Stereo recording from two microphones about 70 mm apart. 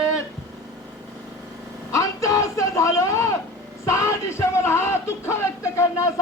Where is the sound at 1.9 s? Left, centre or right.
Left.